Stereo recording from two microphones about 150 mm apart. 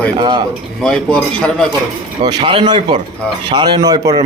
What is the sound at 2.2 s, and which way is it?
A man's voice, 30° right (ahead or behind).